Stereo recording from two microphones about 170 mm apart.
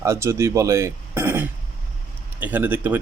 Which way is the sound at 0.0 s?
15° right (ahead or behind).